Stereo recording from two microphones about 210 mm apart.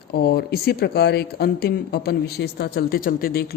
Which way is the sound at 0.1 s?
50° left (ahead or behind).